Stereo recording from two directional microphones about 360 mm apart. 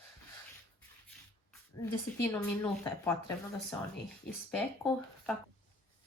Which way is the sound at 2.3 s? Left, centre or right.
Centre.